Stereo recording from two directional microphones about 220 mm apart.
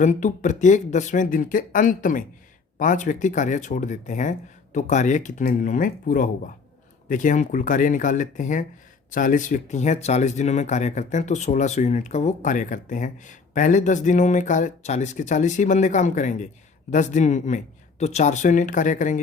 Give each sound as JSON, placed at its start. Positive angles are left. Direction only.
{"t": 0.0, "sound": "speech", "side_deg": 35}